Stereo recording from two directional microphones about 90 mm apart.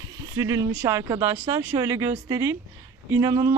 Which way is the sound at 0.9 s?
35° right (ahead or behind).